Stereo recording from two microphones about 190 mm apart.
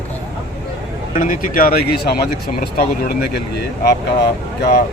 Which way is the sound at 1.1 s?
45° left (ahead or behind).